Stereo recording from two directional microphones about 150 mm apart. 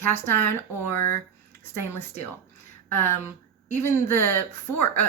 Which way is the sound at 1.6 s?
15° left (ahead or behind).